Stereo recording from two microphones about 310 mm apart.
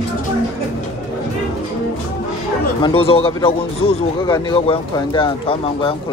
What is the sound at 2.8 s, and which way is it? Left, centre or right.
Speech, centre.